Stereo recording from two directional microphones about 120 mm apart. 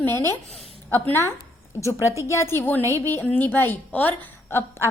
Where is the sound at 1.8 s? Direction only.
25° left (ahead or behind).